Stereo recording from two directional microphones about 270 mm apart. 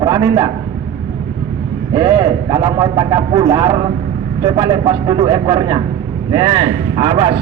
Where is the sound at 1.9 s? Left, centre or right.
Centre.